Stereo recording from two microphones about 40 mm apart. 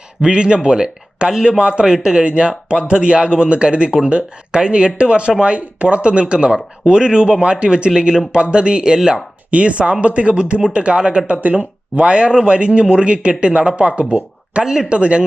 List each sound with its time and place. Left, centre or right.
0.2 s speech: right